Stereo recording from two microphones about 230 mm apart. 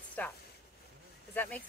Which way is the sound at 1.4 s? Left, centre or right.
Centre.